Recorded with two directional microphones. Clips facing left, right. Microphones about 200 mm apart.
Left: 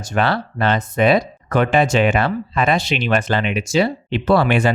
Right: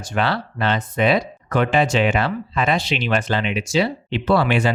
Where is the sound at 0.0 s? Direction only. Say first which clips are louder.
Left 3 dB; 45° left (ahead or behind).